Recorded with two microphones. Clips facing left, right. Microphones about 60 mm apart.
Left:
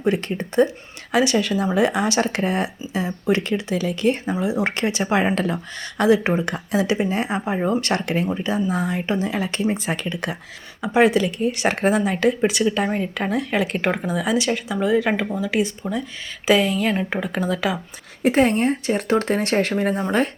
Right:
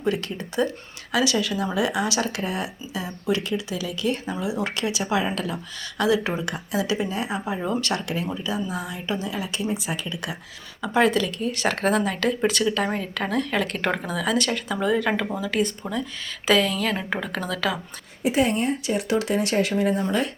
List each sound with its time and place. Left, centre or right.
0.0 s speech: left
10.8 s speech: left
18.2 s speech: left
19.7 s speech: left